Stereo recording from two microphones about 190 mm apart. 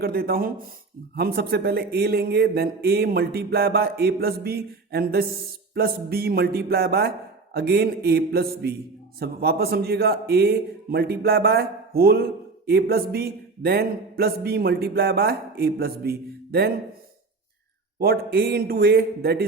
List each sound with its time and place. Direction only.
0.0 s a man's voice: 55° right (ahead or behind)
18.0 s a man's voice: 55° right (ahead or behind)